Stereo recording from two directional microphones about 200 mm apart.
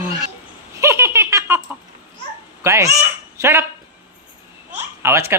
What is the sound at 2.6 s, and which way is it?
Speech, 15° right (ahead or behind).